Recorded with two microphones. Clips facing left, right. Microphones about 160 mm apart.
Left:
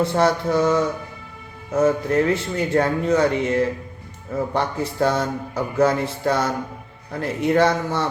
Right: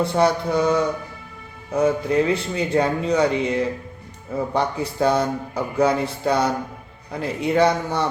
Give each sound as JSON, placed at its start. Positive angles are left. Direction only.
{"t": 0.1, "sound": "speech", "side_deg": -15}